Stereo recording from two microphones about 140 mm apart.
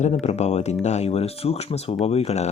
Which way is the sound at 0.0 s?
55° left (ahead or behind).